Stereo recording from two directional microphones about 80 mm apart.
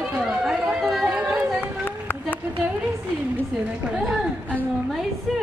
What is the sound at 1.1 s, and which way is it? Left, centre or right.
Chatter, centre.